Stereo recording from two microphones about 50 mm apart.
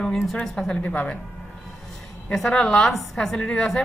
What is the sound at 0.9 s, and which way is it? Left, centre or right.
Speech, left.